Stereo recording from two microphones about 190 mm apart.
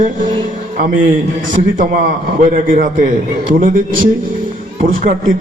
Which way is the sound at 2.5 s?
45° right (ahead or behind).